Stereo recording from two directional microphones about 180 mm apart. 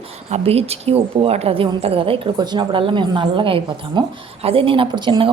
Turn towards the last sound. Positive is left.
turn(degrees=-25)  # may be behind; listen again after turning